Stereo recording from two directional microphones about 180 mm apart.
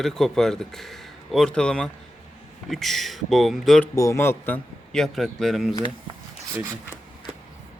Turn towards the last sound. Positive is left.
turn(degrees=-15)  # may be behind; listen again after turning